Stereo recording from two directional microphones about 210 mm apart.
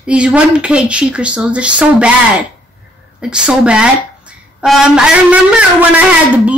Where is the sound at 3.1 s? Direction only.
5° right (ahead or behind).